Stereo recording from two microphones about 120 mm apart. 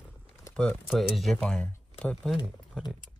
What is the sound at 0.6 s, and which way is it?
Speech, 5° left (ahead or behind).